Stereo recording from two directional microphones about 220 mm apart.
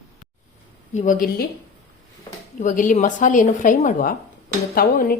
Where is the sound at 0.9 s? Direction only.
35° left (ahead or behind).